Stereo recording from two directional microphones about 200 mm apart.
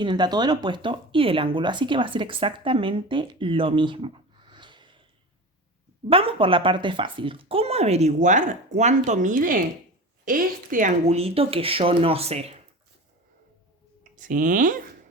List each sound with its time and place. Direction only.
0.0 s speech: 20° right (ahead or behind)
6.1 s speech: 25° right (ahead or behind)
14.0 s speech: 40° right (ahead or behind)